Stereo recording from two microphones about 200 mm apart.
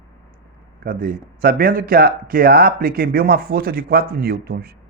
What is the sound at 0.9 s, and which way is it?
Speech, 45° right (ahead or behind).